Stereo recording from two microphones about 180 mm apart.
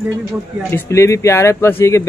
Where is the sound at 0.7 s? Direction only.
15° left (ahead or behind).